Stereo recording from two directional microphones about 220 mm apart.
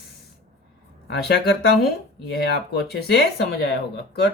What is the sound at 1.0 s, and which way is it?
Speech, 45° left (ahead or behind).